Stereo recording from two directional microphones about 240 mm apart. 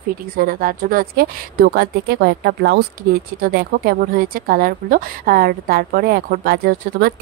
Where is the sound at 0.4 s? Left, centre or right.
Right.